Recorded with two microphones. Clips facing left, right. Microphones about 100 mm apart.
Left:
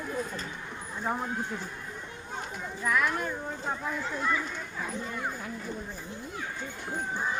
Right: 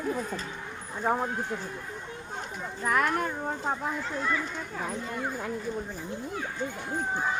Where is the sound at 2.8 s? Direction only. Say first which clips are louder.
Right 2 dB; 45° right (ahead or behind).